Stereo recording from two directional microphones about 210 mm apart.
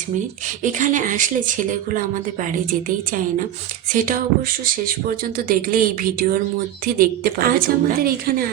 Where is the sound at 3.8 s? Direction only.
40° right (ahead or behind).